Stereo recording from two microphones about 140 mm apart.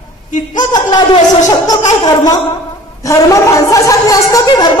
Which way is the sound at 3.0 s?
25° left (ahead or behind).